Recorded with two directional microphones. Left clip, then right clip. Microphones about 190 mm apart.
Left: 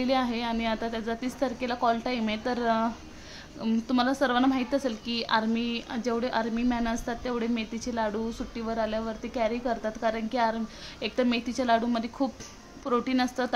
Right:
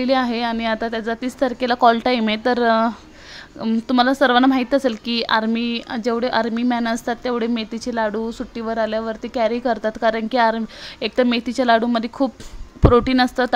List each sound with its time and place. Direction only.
0.0 s speech: 40° right (ahead or behind)